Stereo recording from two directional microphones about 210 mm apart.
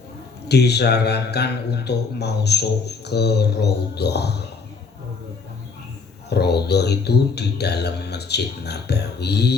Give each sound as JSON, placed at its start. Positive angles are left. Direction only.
{"t": 0.4, "sound": "a man's voice", "side_deg": 50}
{"t": 6.3, "sound": "a man's voice", "side_deg": 50}